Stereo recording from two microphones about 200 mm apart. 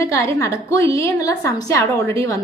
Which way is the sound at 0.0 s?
15° left (ahead or behind).